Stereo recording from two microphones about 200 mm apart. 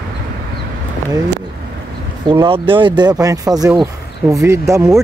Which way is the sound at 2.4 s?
25° right (ahead or behind).